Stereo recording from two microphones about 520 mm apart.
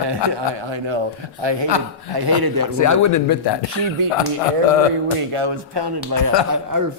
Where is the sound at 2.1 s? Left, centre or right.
Right.